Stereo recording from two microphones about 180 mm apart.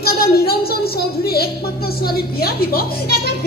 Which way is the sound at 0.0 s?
60° left (ahead or behind).